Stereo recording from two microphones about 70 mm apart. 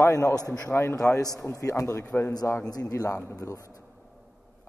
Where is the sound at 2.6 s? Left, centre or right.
Left.